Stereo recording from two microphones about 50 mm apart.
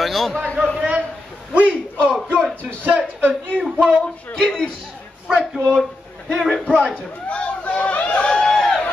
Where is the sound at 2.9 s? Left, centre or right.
Right.